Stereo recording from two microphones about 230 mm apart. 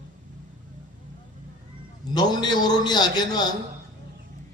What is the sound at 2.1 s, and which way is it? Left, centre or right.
A man's voice, centre.